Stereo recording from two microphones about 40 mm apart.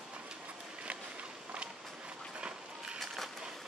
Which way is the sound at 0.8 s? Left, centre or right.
Right.